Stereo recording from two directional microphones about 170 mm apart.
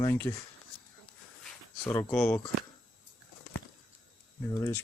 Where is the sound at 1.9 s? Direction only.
20° left (ahead or behind).